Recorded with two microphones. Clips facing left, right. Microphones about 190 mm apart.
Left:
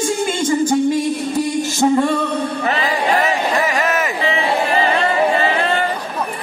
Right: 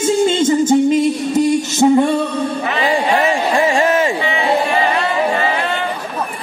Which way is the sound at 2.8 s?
30° right (ahead or behind).